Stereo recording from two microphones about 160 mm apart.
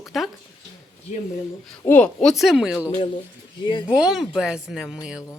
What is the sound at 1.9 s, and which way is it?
Speech, 10° left (ahead or behind).